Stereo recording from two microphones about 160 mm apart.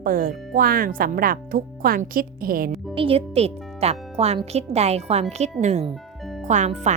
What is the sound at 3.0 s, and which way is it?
A woman's voice, 35° right (ahead or behind).